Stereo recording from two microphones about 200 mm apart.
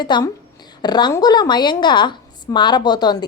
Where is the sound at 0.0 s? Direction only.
20° left (ahead or behind).